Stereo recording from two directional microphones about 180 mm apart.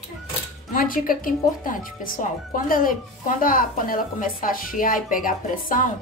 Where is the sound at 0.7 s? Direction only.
50° left (ahead or behind).